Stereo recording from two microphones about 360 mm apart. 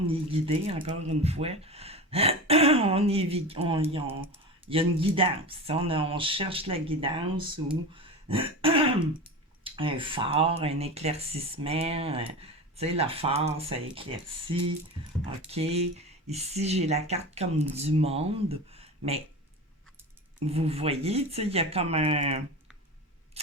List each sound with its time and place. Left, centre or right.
0.1 s speech: centre
7.9 s throat clearing: centre
9.6 s speech: centre
20.5 s speech: centre